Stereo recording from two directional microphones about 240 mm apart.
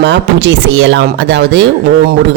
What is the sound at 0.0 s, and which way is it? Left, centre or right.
A man's voice, right.